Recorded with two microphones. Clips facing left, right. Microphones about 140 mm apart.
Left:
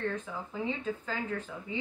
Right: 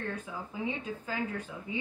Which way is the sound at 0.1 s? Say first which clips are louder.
Left 2 dB; 10° right (ahead or behind).